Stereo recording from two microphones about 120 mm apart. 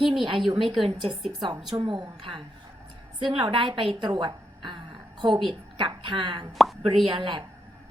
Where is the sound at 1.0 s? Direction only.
45° right (ahead or behind).